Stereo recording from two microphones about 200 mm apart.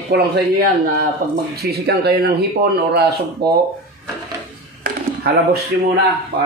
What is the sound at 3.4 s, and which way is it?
Speech, 55° right (ahead or behind).